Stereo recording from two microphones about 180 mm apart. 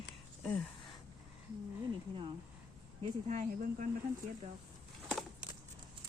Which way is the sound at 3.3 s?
45° right (ahead or behind).